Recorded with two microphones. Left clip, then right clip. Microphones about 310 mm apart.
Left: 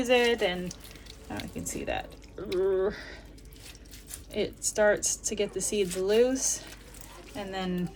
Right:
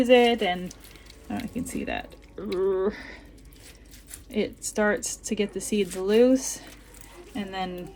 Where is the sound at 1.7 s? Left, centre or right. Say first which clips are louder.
Left 1 dB; right.